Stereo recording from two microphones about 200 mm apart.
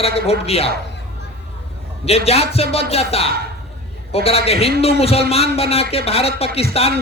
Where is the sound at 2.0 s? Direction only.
30° left (ahead or behind).